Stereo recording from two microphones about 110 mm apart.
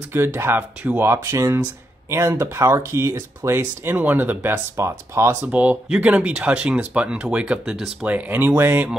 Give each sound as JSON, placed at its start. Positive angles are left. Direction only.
{"t": 0.1, "sound": "speech", "side_deg": -20}
{"t": 5.5, "sound": "speech", "side_deg": -15}